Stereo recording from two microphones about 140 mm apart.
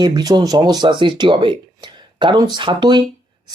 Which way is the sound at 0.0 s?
30° right (ahead or behind).